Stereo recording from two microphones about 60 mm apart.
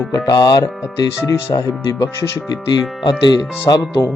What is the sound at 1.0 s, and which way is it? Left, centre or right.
Speech, left.